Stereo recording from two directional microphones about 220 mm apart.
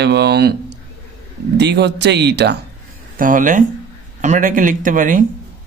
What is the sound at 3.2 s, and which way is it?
Speech, 35° right (ahead or behind).